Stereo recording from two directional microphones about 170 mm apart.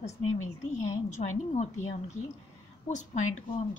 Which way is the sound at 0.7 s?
45° left (ahead or behind).